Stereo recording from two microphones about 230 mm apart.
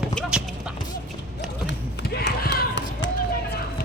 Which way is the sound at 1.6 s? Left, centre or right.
Left.